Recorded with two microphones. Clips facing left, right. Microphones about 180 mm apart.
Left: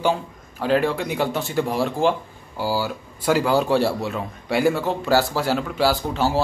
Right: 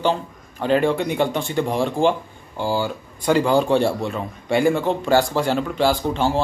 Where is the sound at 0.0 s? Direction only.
5° left (ahead or behind).